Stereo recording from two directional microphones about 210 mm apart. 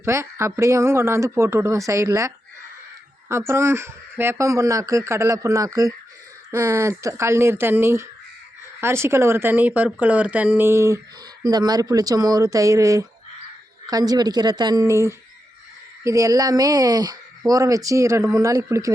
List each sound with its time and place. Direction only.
0.0 s speech: 15° right (ahead or behind)